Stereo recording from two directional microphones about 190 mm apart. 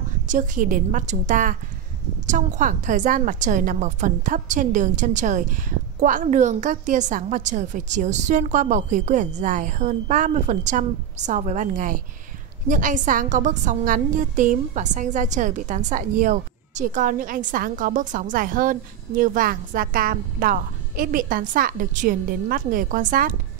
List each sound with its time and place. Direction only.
0.3 s a woman's voice: 45° right (ahead or behind)